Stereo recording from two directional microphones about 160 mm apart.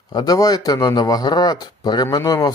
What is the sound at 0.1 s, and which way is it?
Speech, 25° left (ahead or behind).